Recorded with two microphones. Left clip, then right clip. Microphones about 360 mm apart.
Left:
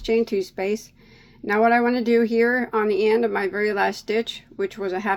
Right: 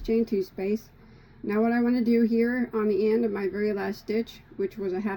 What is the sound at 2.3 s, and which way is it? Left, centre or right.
Speech, left.